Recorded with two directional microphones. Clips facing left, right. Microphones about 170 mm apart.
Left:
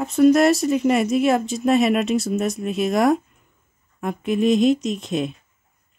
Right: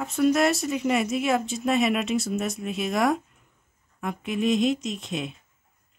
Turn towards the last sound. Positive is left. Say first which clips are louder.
# left 7 dB
turn(degrees=40)  # may be behind; listen again after turning